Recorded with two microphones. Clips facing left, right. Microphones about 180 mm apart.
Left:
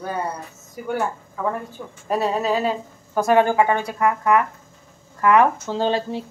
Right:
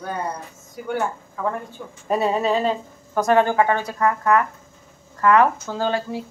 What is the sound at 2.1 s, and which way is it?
A woman's voice, centre (ahead or behind).